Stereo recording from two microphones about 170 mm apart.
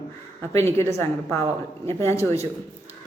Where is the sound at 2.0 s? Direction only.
15° left (ahead or behind).